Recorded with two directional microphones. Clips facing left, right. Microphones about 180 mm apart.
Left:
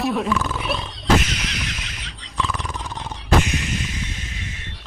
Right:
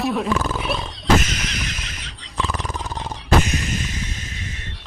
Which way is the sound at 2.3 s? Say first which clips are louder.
Even; 40° right (ahead or behind).